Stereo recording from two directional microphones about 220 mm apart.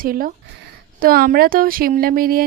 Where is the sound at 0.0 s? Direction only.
40° right (ahead or behind).